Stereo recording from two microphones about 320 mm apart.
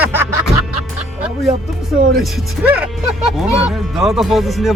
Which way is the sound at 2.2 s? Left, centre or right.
Centre.